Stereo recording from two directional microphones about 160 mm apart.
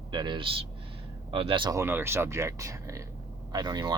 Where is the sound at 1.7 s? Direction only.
15° right (ahead or behind).